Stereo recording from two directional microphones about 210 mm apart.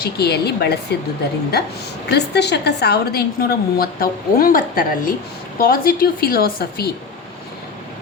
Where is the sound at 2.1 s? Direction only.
55° left (ahead or behind).